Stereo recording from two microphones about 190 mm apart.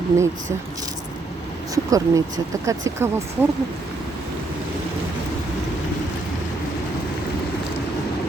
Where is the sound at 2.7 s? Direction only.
15° right (ahead or behind).